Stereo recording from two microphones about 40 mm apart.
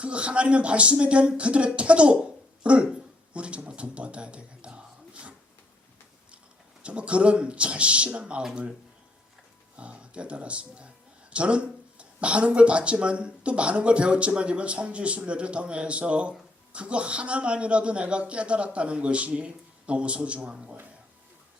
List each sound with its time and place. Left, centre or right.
0.0 s speech: right
6.8 s speech: right
9.7 s speech: right